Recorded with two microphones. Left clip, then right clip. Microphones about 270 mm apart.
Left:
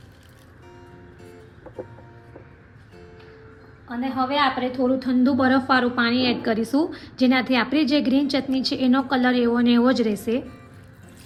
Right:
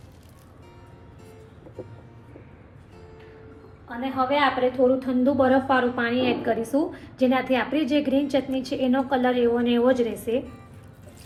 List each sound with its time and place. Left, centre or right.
3.8 s a woman's voice: left